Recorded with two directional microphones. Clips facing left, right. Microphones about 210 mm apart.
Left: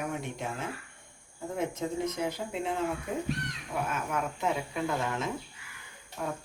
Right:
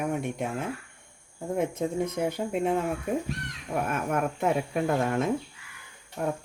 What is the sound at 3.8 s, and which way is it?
Speech, 55° right (ahead or behind).